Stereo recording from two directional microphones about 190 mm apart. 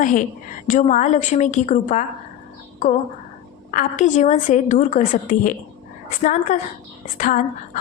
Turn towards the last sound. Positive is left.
turn(degrees=45)  # may be behind; listen again after turning